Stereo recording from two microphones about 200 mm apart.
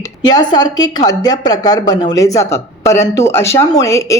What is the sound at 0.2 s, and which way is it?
A woman's voice, 20° left (ahead or behind).